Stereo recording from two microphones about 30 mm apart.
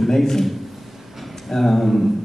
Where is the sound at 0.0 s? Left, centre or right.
Centre.